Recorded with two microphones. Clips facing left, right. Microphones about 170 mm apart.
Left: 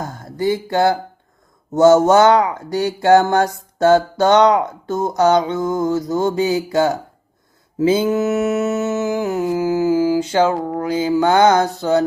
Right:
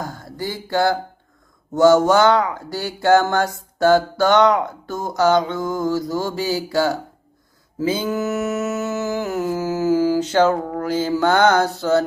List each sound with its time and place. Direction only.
0.0 s a sound: 20° left (ahead or behind)
1.7 s speech: 20° left (ahead or behind)
7.9 s mantra: 25° left (ahead or behind)